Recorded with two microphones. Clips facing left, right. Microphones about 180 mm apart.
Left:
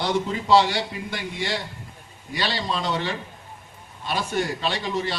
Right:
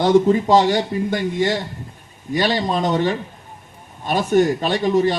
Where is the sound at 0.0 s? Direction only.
45° right (ahead or behind).